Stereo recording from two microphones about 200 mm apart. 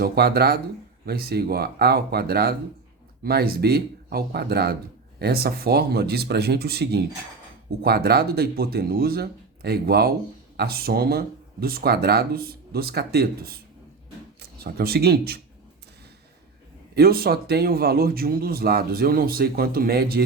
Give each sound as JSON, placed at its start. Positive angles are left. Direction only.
{"t": 0.0, "sound": "speech", "side_deg": -50}
{"t": 16.9, "sound": "speech", "side_deg": -50}